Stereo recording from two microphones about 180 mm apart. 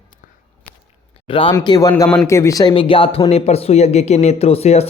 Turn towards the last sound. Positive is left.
turn(degrees=35)  # may be behind; listen again after turning